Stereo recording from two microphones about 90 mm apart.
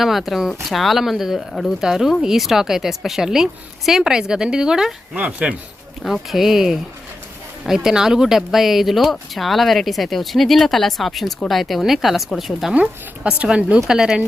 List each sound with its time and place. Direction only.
0.0 s speech: centre (ahead or behind)
5.1 s speech: 15° right (ahead or behind)
6.0 s speech: centre (ahead or behind)
12.7 s speech: 10° right (ahead or behind)